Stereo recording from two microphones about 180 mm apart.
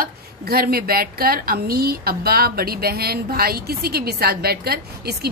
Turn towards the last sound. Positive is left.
turn(degrees=-60)  # may be behind; listen again after turning